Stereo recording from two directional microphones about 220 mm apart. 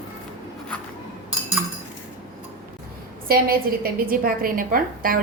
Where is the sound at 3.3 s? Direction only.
40° right (ahead or behind).